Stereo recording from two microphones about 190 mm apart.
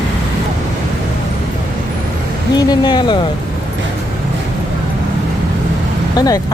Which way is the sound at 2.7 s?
25° left (ahead or behind).